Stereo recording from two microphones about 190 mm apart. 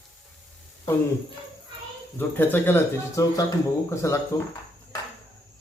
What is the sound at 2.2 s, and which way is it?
Speech, 10° left (ahead or behind).